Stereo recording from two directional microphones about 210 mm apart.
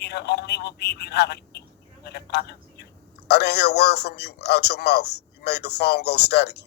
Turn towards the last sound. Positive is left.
turn(degrees=50)  # may be behind; listen again after turning